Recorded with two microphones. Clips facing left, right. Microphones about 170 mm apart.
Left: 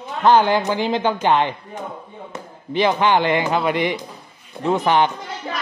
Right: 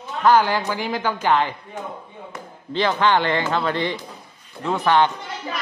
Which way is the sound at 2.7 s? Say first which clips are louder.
Left 2 dB; 15° left (ahead or behind).